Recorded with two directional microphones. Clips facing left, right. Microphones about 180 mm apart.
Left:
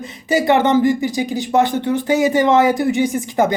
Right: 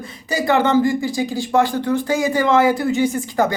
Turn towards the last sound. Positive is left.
turn(degrees=20)  # may be behind; listen again after turning